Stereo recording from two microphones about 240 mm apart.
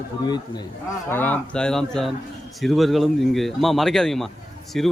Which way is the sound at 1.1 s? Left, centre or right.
Centre.